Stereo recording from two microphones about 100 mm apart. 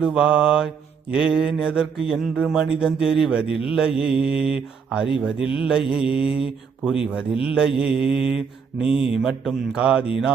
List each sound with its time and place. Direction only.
0.0 s mantra: 10° right (ahead or behind)
3.4 s speech: 65° left (ahead or behind)
3.7 s mantra: 5° right (ahead or behind)